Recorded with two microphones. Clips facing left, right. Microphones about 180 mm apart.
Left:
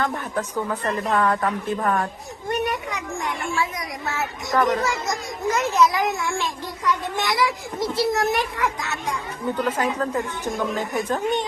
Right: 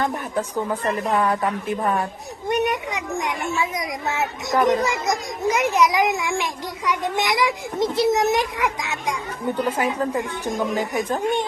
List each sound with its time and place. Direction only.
0.0 s a child's voice: 20° right (ahead or behind)